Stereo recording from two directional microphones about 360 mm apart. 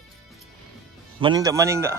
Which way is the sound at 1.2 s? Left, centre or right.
Centre.